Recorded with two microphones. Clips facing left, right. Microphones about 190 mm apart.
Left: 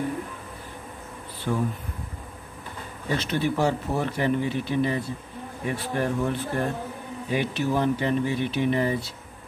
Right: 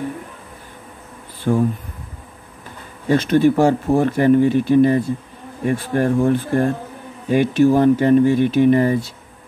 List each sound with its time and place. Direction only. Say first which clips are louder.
1.5 s speech: right 9 dB; 50° right (ahead or behind)
3.2 s speech: right 11 dB; 50° right (ahead or behind)